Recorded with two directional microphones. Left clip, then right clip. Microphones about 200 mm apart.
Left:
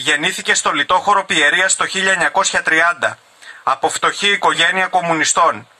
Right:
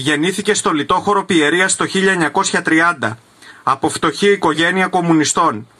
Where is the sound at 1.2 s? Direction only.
45° left (ahead or behind).